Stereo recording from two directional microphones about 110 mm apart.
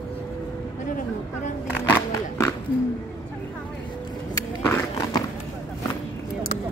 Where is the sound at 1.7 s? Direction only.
15° left (ahead or behind).